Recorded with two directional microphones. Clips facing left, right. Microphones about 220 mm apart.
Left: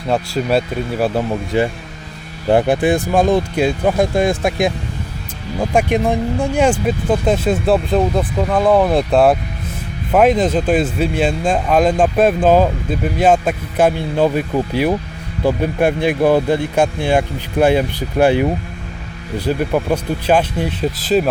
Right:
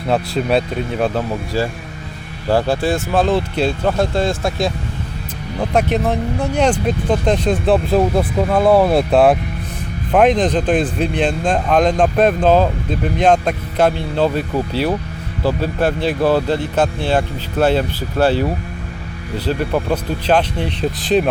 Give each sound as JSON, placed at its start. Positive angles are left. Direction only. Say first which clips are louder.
{"t": 0.1, "sound": "speech", "louder": "even", "side_deg": 0}
{"t": 1.5, "sound": "a man's voice", "louder": "left 5 dB", "side_deg": 20}
{"t": 7.7, "sound": "a man's voice", "louder": "right 1 dB", "side_deg": -5}